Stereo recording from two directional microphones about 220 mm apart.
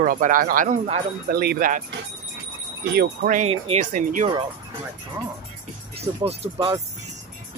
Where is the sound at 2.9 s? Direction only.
35° right (ahead or behind).